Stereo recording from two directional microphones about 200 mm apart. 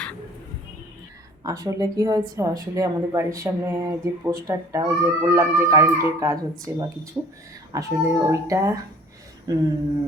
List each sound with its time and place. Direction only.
1.5 s a woman's voice: 20° right (ahead or behind)